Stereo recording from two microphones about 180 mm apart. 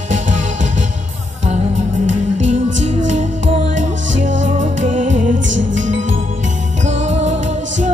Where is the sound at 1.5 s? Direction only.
40° right (ahead or behind).